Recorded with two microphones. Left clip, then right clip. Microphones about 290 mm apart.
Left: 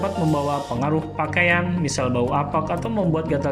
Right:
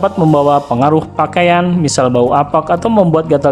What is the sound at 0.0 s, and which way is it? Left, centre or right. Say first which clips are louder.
Speech: right 12 dB; centre.